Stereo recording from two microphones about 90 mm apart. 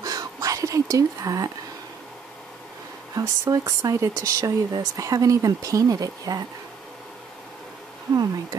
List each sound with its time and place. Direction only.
0.0 s whispering: 40° right (ahead or behind)
3.2 s speech: 40° right (ahead or behind)